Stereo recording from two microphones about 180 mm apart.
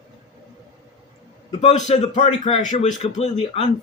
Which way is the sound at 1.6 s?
40° left (ahead or behind).